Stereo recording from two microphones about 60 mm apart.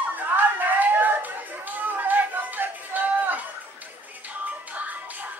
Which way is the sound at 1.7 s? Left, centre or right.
Right.